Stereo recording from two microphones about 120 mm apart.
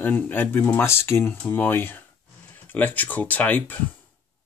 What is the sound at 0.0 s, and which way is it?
Speech, 15° left (ahead or behind).